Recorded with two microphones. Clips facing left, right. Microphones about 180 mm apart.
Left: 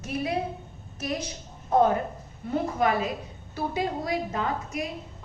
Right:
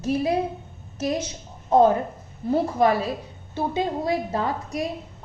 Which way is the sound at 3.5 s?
25° right (ahead or behind).